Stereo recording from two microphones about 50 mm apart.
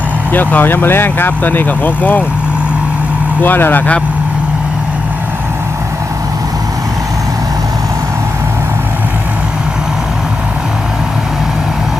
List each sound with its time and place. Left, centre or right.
0.3 s speech: left
3.4 s speech: left